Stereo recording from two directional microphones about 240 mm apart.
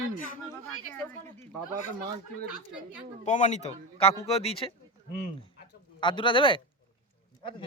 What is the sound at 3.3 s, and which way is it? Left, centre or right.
A man's voice, left.